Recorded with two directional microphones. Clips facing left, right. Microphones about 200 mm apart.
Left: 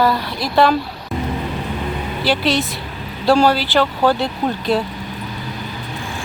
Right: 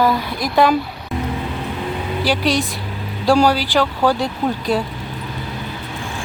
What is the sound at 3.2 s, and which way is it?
Speech, 10° right (ahead or behind).